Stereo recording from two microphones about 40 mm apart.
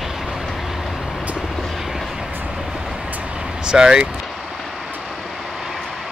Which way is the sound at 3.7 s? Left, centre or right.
Centre.